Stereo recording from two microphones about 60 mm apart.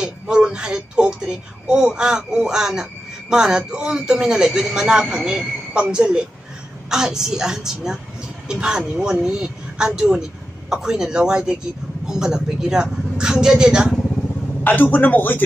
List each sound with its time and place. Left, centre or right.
0.0 s speech: centre
14.6 s a man's voice: left